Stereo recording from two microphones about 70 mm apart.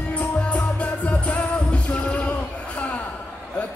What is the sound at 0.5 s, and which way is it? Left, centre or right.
Music, centre.